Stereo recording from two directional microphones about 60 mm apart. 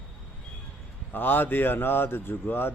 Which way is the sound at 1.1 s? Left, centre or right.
Left.